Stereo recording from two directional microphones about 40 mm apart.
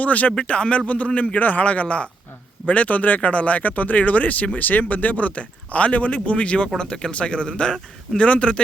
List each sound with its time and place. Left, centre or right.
0.0 s speech: left